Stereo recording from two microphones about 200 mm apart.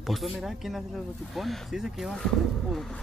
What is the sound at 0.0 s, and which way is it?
Speech, centre (ahead or behind).